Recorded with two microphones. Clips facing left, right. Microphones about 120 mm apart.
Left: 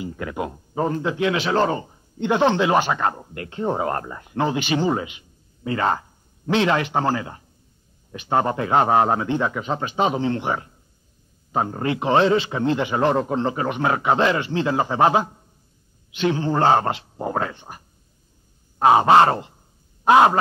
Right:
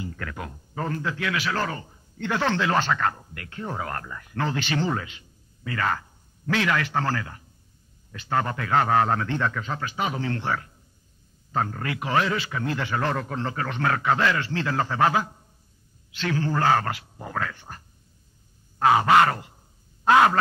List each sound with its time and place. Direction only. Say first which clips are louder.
0.0 s a man's voice: left 7 dB; 20° left (ahead or behind)
18.8 s a man's voice: left 4 dB; 25° left (ahead or behind)